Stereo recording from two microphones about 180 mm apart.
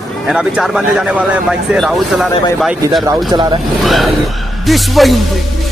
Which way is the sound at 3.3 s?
30° right (ahead or behind).